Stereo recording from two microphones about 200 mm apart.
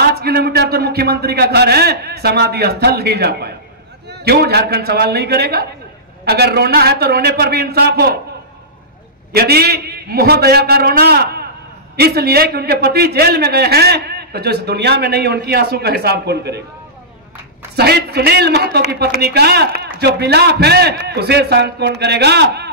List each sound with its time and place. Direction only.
0.0 s a man's voice: 50° right (ahead or behind)
9.3 s a man's voice: 50° right (ahead or behind)
17.7 s a man's voice: 55° right (ahead or behind)